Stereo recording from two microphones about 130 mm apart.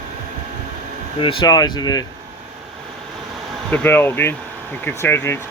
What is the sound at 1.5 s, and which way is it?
Speech, 30° left (ahead or behind).